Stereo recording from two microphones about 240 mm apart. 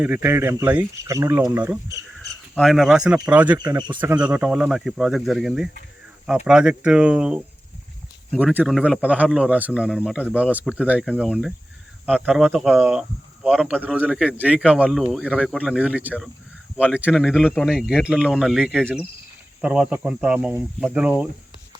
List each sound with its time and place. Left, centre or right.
0.0 s speech: centre
3.6 s speech: centre
4.1 s speech: centre